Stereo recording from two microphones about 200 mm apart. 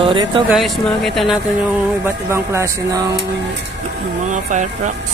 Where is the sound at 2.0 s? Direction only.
15° right (ahead or behind).